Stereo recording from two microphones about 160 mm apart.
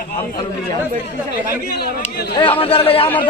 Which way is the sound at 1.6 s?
75° left (ahead or behind).